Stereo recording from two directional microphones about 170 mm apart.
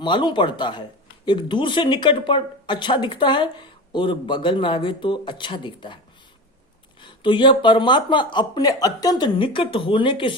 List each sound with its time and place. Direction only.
0.0 s speech: 25° left (ahead or behind)
7.0 s speech: 30° left (ahead or behind)